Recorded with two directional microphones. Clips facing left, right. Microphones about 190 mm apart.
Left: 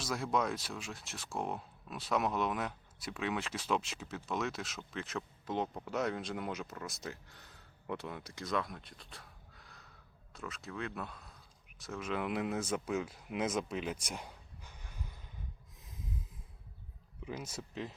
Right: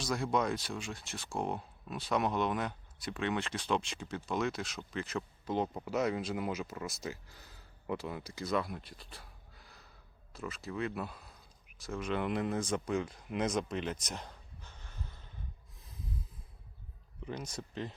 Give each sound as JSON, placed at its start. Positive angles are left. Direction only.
{"t": 0.0, "sound": "speech", "side_deg": 0}
{"t": 17.2, "sound": "speech", "side_deg": 5}